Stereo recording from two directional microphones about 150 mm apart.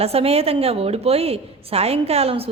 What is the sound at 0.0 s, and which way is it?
A woman's voice, 40° right (ahead or behind).